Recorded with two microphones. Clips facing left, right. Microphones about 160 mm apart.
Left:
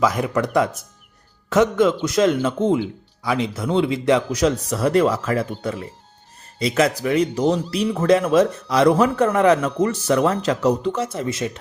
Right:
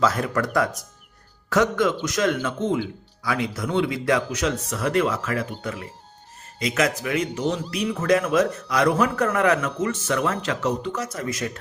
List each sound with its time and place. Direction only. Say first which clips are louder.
0.0 s a man's voice: left 3 dB; 15° left (ahead or behind)